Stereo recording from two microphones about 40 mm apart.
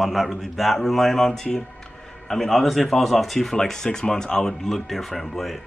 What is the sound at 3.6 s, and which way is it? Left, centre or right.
Speech, centre.